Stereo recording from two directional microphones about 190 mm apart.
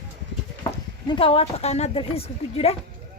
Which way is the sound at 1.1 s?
30° left (ahead or behind).